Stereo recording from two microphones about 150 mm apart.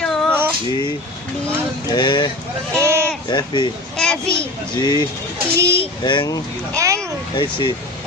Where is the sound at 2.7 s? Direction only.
20° right (ahead or behind).